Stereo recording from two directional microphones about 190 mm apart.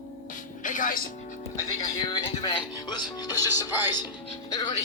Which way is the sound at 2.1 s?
20° left (ahead or behind).